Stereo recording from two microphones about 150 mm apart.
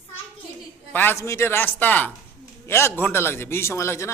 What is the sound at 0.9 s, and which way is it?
A man's voice, 15° left (ahead or behind).